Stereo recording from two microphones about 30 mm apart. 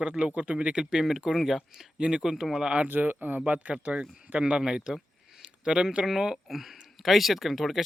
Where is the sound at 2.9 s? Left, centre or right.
Right.